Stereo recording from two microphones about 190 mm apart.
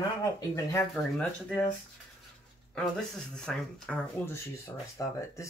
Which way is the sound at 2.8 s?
5° left (ahead or behind).